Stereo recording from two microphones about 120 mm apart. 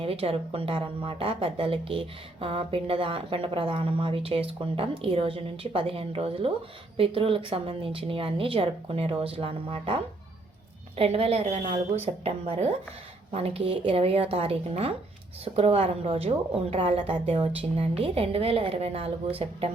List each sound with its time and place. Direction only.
0.0 s a woman's voice: 50° right (ahead or behind)